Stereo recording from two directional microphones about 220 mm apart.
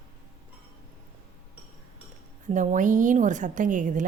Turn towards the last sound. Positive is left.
turn(degrees=-35)  # may be behind; listen again after turning